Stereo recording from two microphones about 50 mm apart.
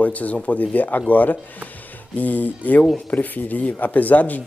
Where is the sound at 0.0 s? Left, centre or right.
Left.